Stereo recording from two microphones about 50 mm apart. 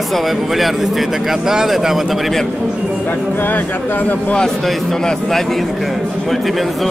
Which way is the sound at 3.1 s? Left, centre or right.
Left.